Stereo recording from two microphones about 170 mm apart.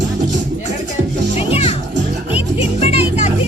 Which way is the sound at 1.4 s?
35° left (ahead or behind).